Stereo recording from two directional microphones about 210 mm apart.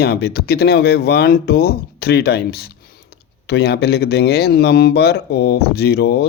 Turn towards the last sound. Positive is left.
turn(degrees=50)  # may be behind; listen again after turning